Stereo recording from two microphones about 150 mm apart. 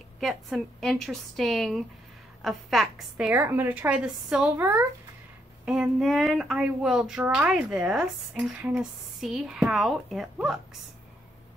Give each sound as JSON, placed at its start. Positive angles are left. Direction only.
{"t": 0.2, "sound": "a woman's voice", "side_deg": 0}